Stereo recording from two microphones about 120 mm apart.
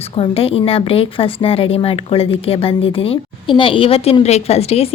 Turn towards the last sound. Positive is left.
turn(degrees=55)  # may be behind; listen again after turning